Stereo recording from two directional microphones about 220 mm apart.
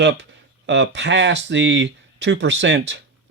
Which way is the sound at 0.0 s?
50° right (ahead or behind).